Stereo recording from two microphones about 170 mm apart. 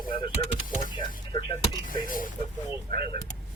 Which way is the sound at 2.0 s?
55° left (ahead or behind).